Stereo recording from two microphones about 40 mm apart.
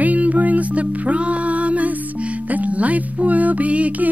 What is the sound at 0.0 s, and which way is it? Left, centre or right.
Music, right.